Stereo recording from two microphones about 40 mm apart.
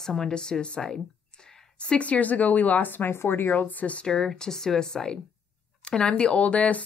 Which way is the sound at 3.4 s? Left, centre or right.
Left.